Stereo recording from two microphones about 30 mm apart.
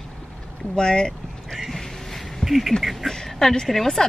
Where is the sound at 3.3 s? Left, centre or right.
Centre.